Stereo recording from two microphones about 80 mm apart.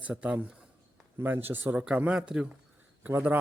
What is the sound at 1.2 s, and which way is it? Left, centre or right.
Speech, right.